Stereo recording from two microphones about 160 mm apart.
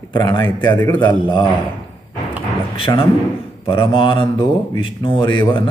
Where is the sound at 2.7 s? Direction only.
35° left (ahead or behind).